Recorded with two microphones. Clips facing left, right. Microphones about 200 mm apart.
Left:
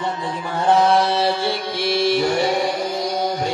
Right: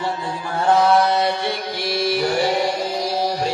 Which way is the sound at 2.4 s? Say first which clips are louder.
Even; centre (ahead or behind).